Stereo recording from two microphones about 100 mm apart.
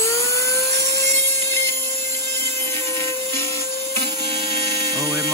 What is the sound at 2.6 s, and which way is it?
Music, 25° left (ahead or behind).